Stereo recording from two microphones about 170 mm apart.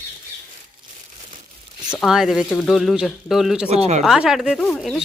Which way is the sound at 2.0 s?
Centre (ahead or behind).